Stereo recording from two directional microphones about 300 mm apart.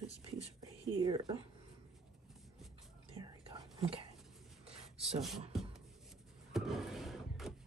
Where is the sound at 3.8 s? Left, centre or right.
Centre.